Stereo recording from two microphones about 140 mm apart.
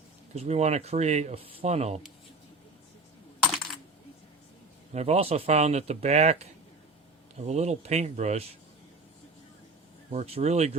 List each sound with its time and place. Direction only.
0.3 s speech: 50° right (ahead or behind)
4.9 s speech: 50° right (ahead or behind)
10.1 s speech: 50° right (ahead or behind)